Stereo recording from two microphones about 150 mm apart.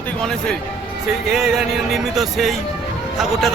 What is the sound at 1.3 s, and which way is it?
A man's voice, 5° right (ahead or behind).